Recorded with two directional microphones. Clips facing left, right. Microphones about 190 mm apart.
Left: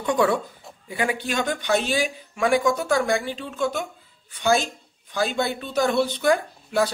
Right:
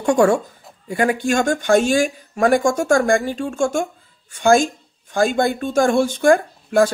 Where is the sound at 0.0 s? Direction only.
45° right (ahead or behind).